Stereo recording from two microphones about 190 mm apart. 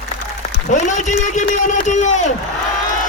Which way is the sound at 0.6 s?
40° left (ahead or behind).